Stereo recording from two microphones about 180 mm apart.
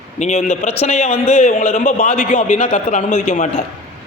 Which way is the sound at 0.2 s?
40° left (ahead or behind).